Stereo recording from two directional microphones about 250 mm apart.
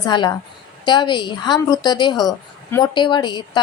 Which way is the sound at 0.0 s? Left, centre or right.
Centre.